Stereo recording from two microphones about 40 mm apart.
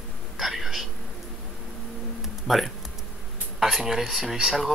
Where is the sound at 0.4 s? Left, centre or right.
Centre.